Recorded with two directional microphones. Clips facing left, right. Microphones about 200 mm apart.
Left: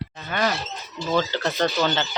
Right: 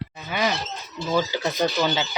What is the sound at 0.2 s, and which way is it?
Speech, 5° right (ahead or behind).